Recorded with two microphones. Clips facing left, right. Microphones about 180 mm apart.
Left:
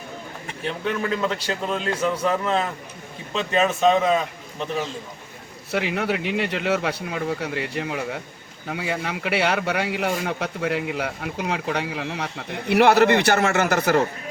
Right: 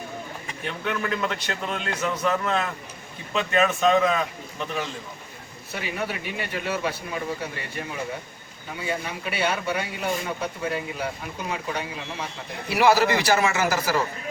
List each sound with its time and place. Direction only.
0.6 s a man's voice: 30° left (ahead or behind)
5.7 s a man's voice: 75° left (ahead or behind)